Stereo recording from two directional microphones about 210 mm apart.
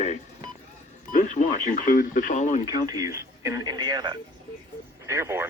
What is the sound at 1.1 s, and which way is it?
Speech, 35° left (ahead or behind).